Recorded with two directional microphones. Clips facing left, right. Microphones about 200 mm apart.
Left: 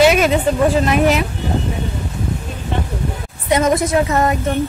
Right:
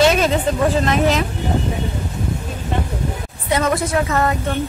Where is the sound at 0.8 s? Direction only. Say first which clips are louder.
Left 2 dB; 10° left (ahead or behind).